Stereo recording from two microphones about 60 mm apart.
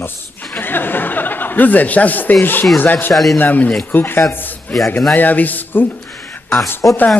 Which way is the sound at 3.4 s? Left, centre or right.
Left.